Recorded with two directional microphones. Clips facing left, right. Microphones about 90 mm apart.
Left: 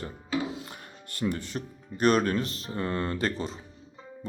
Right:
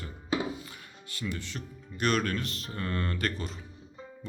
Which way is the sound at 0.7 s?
45° left (ahead or behind).